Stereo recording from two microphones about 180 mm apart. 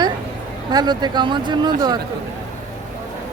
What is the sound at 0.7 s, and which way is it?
Speech, 20° right (ahead or behind).